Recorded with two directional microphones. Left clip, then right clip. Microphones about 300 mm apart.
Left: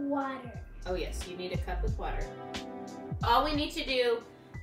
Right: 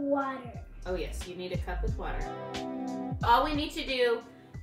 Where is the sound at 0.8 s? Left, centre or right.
Centre.